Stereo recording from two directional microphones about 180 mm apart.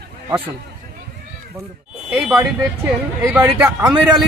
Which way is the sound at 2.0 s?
5° right (ahead or behind).